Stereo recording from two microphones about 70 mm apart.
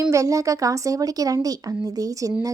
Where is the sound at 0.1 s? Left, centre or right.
Right.